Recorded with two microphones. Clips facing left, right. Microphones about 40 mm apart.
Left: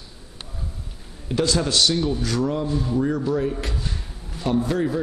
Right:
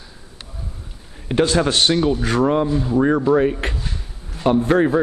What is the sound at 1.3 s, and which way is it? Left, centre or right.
A man's voice, right.